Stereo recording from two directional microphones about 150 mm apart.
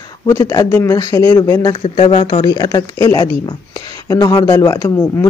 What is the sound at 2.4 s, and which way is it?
Speech, 25° left (ahead or behind).